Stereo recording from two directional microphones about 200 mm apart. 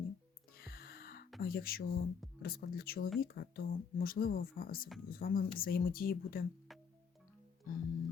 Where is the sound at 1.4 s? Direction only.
50° left (ahead or behind).